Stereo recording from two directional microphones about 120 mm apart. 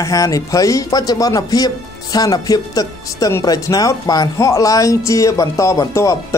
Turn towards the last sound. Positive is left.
turn(degrees=25)  # may be behind; listen again after turning